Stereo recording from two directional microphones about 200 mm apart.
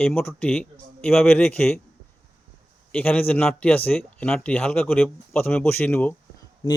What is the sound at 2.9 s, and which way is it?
Speech, 10° left (ahead or behind).